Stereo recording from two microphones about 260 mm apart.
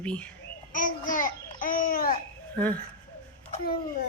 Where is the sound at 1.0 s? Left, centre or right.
Left.